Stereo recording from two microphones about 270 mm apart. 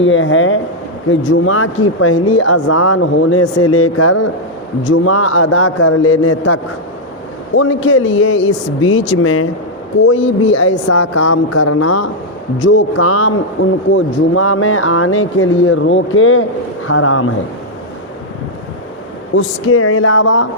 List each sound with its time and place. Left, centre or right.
0.0 s a man's voice: left
10.8 s a woman's voice: left
12.5 s a man's voice: left
19.4 s a man's voice: left